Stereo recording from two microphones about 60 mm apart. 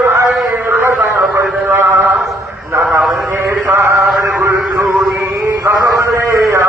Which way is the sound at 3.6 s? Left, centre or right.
Right.